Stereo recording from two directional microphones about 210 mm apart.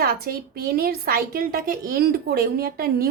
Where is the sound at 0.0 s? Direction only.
45° right (ahead or behind).